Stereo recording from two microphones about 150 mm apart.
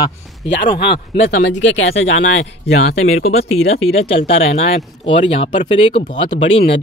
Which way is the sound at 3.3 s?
45° left (ahead or behind).